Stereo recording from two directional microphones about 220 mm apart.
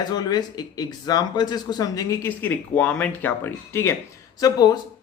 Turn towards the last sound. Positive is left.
turn(degrees=15)  # may be behind; listen again after turning